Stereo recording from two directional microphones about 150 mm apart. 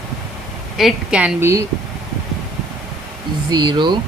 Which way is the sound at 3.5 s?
30° right (ahead or behind).